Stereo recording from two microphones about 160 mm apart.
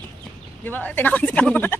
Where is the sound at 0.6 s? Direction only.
10° left (ahead or behind).